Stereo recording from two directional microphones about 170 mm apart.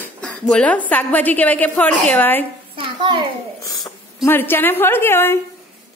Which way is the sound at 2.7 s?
30° right (ahead or behind).